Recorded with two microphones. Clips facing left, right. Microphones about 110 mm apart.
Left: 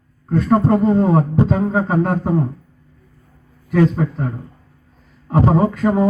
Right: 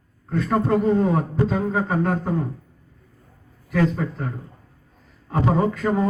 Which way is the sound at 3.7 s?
25° left (ahead or behind).